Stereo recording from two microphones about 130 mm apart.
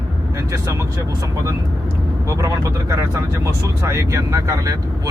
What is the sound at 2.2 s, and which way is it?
Speech, 25° right (ahead or behind).